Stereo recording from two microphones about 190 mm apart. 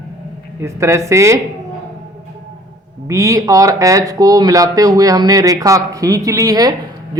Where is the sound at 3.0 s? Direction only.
15° right (ahead or behind).